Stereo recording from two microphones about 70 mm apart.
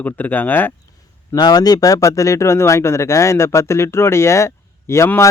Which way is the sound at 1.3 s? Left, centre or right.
Left.